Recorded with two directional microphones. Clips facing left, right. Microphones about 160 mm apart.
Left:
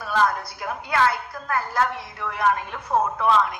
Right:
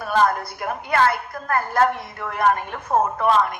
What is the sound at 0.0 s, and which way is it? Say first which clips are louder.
A woman's voice: right 3 dB; 50° right (ahead or behind).